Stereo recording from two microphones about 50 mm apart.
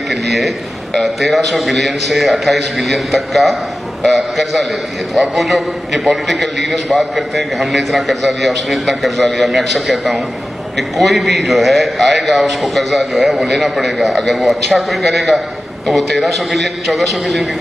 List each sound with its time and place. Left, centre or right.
0.1 s a man's voice: centre